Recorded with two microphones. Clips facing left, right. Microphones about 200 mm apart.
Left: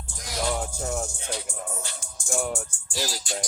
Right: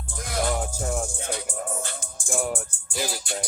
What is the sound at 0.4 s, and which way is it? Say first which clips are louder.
Music: left 1 dB; centre (ahead or behind).